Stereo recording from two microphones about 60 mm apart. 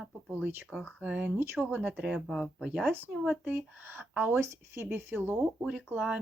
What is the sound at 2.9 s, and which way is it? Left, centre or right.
Speech, right.